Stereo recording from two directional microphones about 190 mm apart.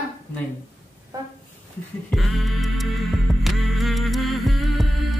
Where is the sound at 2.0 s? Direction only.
Centre (ahead or behind).